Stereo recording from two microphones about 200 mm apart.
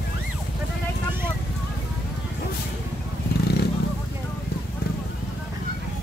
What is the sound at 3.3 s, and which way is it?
Vehicle, 50° left (ahead or behind).